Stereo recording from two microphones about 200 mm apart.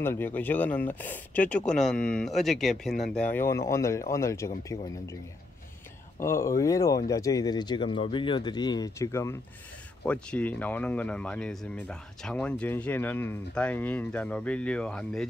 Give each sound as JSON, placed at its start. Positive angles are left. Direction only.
{"t": 0.0, "sound": "speech", "side_deg": 10}
{"t": 6.1, "sound": "speech", "side_deg": 15}